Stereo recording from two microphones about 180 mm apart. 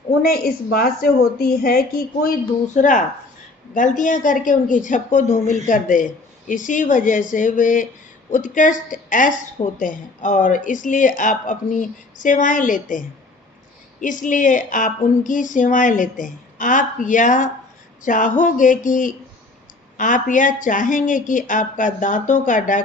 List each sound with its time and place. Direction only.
0.2 s speech: 55° left (ahead or behind)
2.7 s a woman's voice: 45° left (ahead or behind)